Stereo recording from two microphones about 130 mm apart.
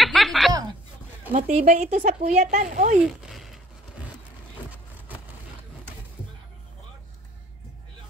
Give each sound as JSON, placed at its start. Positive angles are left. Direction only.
{"t": 0.0, "sound": "chuckle", "side_deg": 0}
{"t": 1.3, "sound": "speech", "side_deg": -70}
{"t": 3.0, "sound": "a sound", "side_deg": 0}